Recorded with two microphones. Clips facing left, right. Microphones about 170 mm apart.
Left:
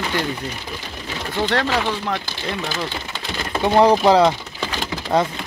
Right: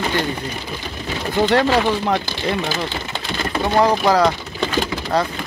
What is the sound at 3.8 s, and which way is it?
Speech, 25° left (ahead or behind).